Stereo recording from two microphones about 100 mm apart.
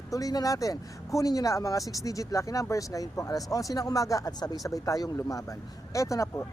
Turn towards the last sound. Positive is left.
turn(degrees=30)  # may be behind; listen again after turning